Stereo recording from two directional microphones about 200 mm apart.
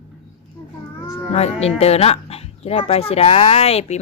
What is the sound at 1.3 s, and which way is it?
Speech, 30° left (ahead or behind).